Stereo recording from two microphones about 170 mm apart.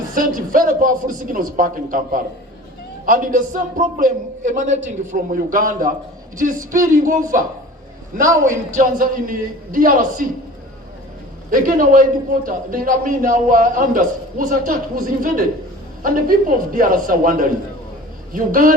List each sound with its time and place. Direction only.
0.1 s a man's voice: 55° right (ahead or behind)
11.5 s a man's voice: 55° right (ahead or behind)
16.7 s a man's voice: 55° right (ahead or behind)